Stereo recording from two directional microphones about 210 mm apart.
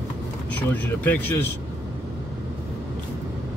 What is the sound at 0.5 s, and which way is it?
Speech, 5° left (ahead or behind).